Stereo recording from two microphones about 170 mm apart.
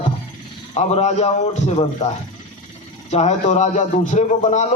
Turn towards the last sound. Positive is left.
turn(degrees=45)  # may be behind; listen again after turning